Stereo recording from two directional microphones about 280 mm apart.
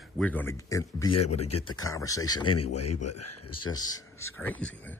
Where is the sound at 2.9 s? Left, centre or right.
Left.